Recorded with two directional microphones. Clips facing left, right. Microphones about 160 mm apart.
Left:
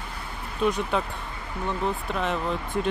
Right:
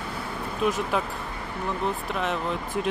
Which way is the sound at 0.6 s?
5° right (ahead or behind).